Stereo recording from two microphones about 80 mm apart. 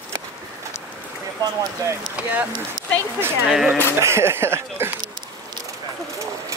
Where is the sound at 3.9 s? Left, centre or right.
Right.